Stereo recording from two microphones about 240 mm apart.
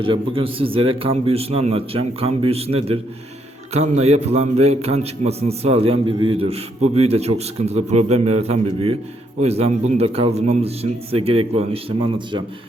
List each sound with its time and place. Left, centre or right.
0.0 s a man's voice: right